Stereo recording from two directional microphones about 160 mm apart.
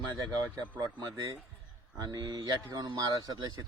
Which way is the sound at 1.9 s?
25° right (ahead or behind).